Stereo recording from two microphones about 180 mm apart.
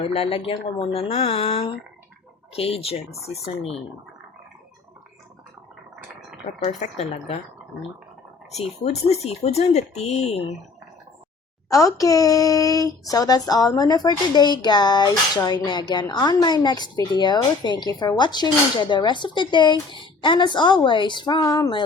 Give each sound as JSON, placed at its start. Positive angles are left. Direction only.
{"t": 0.0, "sound": "speech", "side_deg": 30}
{"t": 6.7, "sound": "speech", "side_deg": 40}
{"t": 8.5, "sound": "speech", "side_deg": 35}
{"t": 11.7, "sound": "speech", "side_deg": 20}